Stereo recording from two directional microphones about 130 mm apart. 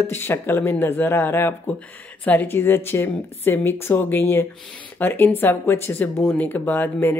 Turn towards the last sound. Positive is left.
turn(degrees=15)  # may be behind; listen again after turning